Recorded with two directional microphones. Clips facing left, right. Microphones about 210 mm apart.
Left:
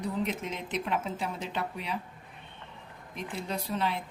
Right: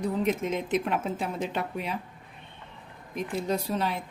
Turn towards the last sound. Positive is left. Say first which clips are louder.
# right 4 dB
turn(degrees=-45)  # may be behind; listen again after turning